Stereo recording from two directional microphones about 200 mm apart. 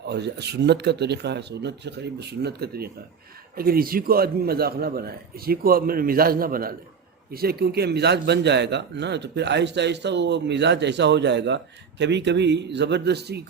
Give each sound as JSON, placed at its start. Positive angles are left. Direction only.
{"t": 0.1, "sound": "a man's voice", "side_deg": -55}